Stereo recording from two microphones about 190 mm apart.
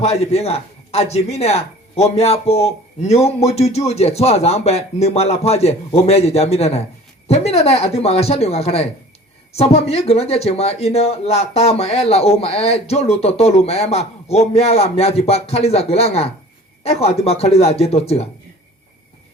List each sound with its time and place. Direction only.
0.0 s speech: 35° left (ahead or behind)